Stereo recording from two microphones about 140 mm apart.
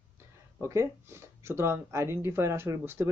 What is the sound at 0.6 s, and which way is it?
Speech, 20° right (ahead or behind).